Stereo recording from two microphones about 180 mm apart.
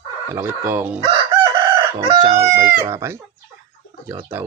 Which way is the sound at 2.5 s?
15° right (ahead or behind).